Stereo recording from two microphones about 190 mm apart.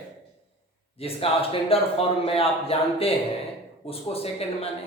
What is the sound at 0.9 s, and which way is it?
A man's voice, 30° left (ahead or behind).